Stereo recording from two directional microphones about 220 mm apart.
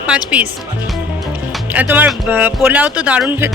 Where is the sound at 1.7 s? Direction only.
10° right (ahead or behind).